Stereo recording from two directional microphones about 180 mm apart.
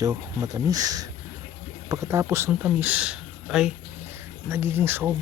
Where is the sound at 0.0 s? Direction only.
20° right (ahead or behind).